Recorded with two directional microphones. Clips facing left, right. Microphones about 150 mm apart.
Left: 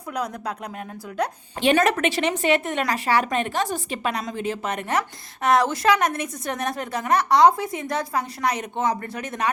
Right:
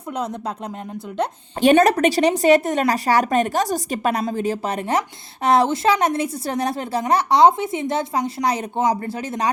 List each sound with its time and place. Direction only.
1.8 s a woman's voice: 35° right (ahead or behind)